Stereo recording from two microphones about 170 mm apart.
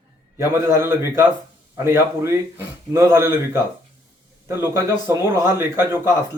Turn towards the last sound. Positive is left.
turn(degrees=-15)  # may be behind; listen again after turning